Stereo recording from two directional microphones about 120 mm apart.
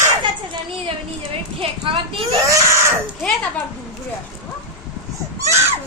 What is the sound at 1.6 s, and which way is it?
Speech, 50° right (ahead or behind).